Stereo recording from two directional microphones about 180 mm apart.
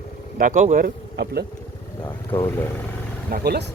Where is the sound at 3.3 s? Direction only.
60° right (ahead or behind).